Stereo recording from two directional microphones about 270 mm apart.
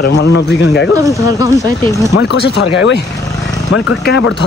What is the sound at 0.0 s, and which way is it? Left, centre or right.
Speech, left.